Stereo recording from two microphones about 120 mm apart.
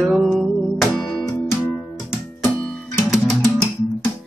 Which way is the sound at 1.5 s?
20° left (ahead or behind).